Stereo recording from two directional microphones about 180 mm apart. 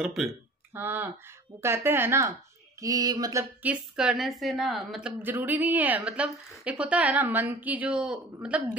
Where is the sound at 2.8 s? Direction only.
20° right (ahead or behind).